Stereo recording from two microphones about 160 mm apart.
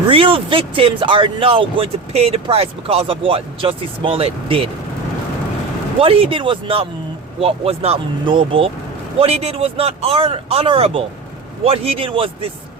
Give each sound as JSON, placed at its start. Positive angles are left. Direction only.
{"t": 0.1, "sound": "speech", "side_deg": -35}
{"t": 6.0, "sound": "speech", "side_deg": -35}